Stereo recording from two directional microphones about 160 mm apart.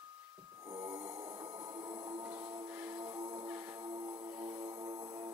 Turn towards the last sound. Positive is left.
turn(degrees=-25)  # may be behind; listen again after turning